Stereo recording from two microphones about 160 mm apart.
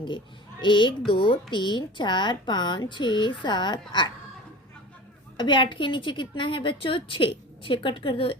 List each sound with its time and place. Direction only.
0.6 s a woman's voice: 30° left (ahead or behind)
5.4 s a woman's voice: 30° left (ahead or behind)